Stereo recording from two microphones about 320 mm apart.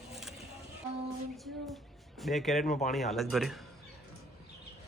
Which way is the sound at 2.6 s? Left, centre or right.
Left.